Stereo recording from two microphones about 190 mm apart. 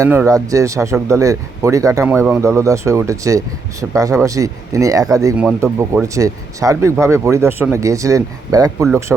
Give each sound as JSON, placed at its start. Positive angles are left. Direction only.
{"t": 0.0, "sound": "a man's voice", "side_deg": -15}